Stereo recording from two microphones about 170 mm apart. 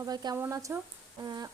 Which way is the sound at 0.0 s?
25° right (ahead or behind).